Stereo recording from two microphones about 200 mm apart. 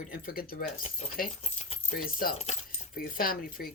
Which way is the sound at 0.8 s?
30° left (ahead or behind).